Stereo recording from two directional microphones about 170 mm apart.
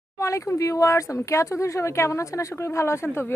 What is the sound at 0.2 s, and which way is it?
A woman's voice, 20° left (ahead or behind).